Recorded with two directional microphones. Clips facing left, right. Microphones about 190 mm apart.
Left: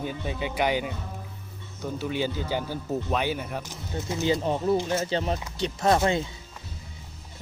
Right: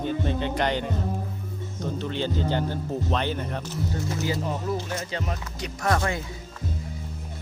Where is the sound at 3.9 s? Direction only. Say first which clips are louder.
Left 4 dB; 20° left (ahead or behind).